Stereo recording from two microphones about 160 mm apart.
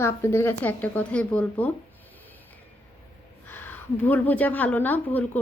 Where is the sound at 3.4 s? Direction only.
10° left (ahead or behind).